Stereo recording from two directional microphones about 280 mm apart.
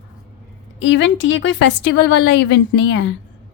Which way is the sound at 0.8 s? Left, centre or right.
Left.